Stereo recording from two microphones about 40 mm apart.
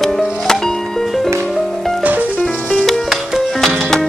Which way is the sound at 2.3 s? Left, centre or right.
Left.